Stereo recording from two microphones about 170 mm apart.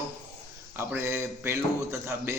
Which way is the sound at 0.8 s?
15° right (ahead or behind).